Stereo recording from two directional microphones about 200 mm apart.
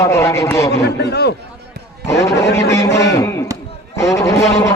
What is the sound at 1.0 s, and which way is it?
Speech, 55° left (ahead or behind).